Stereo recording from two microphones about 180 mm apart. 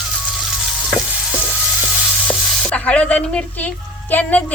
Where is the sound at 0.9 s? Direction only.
Centre (ahead or behind).